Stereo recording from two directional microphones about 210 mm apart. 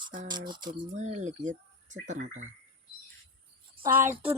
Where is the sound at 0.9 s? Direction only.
35° right (ahead or behind).